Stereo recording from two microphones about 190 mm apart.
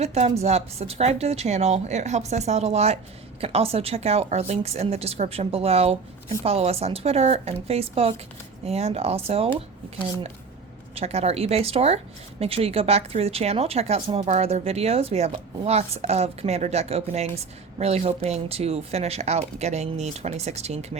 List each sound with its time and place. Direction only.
0.0 s speech: 35° right (ahead or behind)
10.9 s speech: 35° right (ahead or behind)